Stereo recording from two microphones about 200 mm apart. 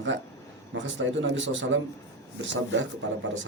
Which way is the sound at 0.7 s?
65° right (ahead or behind).